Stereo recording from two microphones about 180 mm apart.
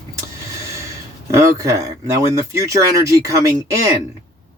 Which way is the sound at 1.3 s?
15° right (ahead or behind).